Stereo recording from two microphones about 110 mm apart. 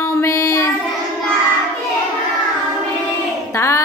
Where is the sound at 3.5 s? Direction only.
25° left (ahead or behind).